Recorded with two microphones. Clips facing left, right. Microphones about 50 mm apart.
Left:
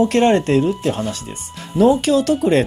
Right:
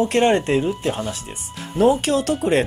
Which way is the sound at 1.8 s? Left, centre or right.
Centre.